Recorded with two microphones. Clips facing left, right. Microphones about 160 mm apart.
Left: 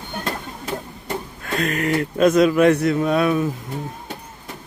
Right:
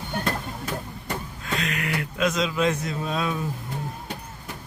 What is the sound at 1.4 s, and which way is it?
Speech, 50° left (ahead or behind).